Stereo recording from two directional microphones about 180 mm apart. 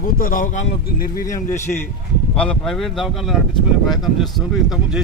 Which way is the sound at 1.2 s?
20° left (ahead or behind).